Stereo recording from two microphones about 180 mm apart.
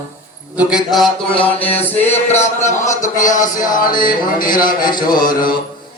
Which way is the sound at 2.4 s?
40° left (ahead or behind).